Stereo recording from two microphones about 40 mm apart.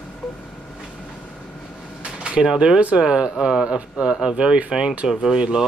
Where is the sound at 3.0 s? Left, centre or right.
Right.